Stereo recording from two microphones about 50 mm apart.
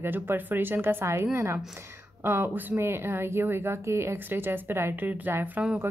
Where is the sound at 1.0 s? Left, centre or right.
Right.